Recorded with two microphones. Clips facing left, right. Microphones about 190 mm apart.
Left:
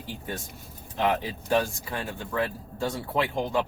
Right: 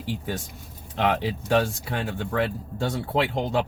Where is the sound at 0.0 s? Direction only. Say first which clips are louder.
Right 5 dB; 80° right.